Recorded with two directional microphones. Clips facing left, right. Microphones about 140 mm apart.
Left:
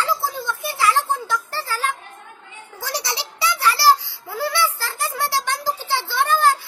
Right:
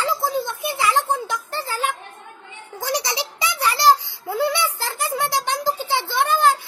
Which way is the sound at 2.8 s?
15° right (ahead or behind).